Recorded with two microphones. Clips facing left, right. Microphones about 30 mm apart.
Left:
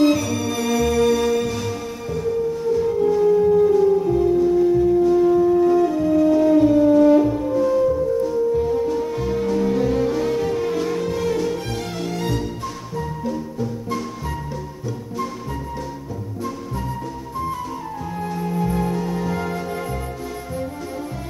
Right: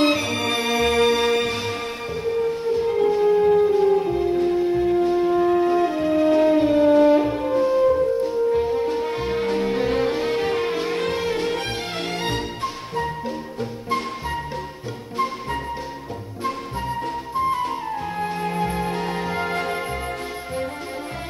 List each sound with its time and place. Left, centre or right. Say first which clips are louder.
0.0 s music: left 2 dB; right
17.4 s music: right 4 dB; right
19.2 s music: even; right
19.5 s music: right 2 dB; right